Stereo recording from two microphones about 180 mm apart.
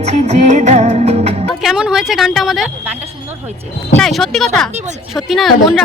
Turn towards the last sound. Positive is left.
turn(degrees=0)  # may be behind; listen again after turning